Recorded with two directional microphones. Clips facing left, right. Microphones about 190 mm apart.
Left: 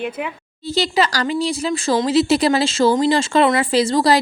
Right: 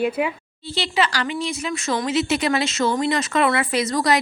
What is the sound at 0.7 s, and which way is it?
A woman's voice, 40° left (ahead or behind).